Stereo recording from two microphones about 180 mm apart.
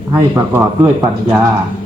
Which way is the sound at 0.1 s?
15° right (ahead or behind).